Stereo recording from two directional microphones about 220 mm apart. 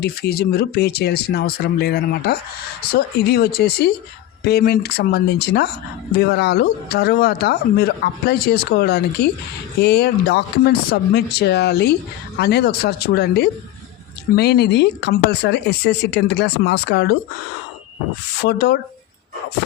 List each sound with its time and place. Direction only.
0.0 s speech: 45° left (ahead or behind)
18.4 s speech: 50° left (ahead or behind)